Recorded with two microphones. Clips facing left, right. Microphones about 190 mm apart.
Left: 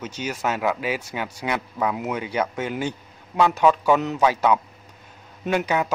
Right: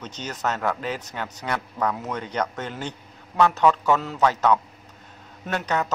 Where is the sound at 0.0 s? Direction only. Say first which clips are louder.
Left 2 dB; 10° left (ahead or behind).